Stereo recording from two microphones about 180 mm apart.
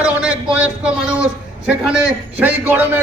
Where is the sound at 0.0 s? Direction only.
5° right (ahead or behind).